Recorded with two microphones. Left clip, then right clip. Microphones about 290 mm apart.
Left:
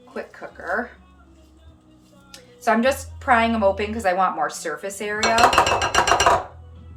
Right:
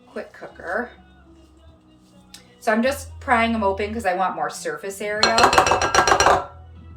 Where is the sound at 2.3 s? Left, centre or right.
Centre.